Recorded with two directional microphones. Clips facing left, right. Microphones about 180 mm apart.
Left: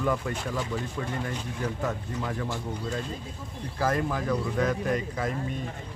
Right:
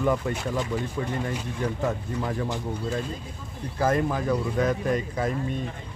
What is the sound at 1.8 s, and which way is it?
Speech, 25° right (ahead or behind).